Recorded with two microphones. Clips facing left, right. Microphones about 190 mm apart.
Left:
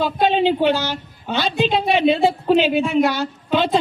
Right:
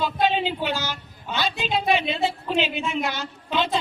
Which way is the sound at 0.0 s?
50° left (ahead or behind).